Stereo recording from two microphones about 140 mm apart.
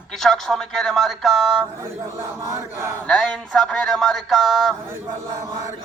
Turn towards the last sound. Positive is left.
turn(degrees=0)  # may be behind; listen again after turning